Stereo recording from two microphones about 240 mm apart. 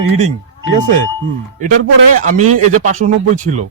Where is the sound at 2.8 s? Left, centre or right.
Right.